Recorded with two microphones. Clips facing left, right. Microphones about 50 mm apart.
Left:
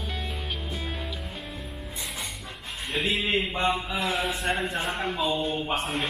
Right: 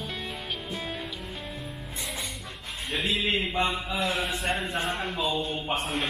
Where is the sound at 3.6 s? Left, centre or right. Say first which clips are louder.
Left 1 dB; left.